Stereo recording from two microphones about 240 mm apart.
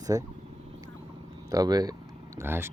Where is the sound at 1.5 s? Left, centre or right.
Centre.